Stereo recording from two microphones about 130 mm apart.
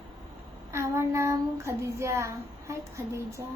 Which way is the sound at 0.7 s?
20° right (ahead or behind).